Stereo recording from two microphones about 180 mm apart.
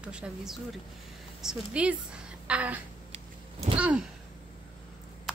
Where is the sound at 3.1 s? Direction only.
35° right (ahead or behind).